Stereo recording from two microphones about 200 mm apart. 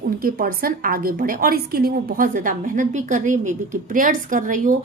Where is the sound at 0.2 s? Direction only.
45° right (ahead or behind).